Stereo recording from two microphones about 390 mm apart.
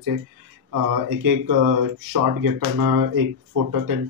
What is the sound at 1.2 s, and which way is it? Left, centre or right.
Speech, right.